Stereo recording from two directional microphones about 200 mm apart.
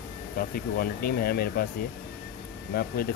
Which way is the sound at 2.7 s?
50° left (ahead or behind).